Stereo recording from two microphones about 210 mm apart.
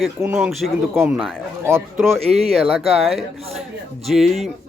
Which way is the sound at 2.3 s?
30° right (ahead or behind).